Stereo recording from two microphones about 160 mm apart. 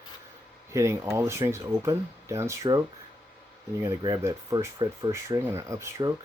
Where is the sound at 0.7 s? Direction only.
15° right (ahead or behind).